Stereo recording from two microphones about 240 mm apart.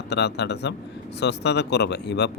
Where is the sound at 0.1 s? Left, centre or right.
Left.